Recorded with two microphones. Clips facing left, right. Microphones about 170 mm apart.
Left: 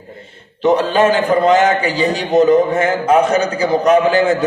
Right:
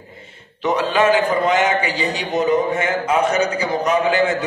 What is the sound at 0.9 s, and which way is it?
A man's voice, 35° left (ahead or behind).